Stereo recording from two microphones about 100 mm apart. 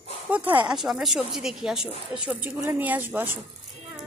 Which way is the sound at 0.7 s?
5° right (ahead or behind).